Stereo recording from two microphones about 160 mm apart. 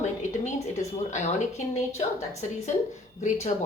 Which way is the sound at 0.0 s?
45° left (ahead or behind).